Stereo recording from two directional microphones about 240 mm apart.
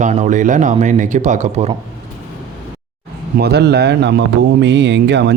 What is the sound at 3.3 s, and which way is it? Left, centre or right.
Speech, right.